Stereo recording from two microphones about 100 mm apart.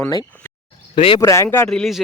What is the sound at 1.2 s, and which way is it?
Speech, 30° left (ahead or behind).